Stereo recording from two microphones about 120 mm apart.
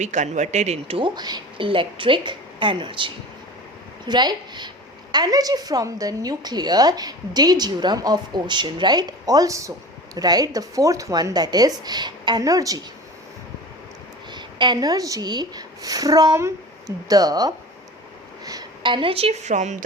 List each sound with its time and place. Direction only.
0.0 s speech: 90° right; by 0.9 s 70° right (ahead or behind)
0.9 s a woman's voice: 40° right (ahead or behind)
14.3 s a woman's voice: 40° right (ahead or behind)
18.8 s speech: 40° right (ahead or behind); by 19.8 s 85° right